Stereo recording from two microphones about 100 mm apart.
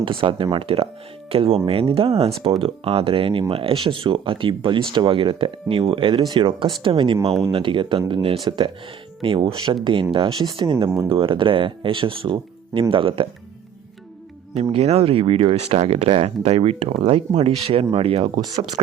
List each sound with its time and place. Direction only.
0.0 s speech: 60° right (ahead or behind)
8.4 s speech: 50° right (ahead or behind)
9.2 s speech: 65° right (ahead or behind)
14.6 s speech: 80° right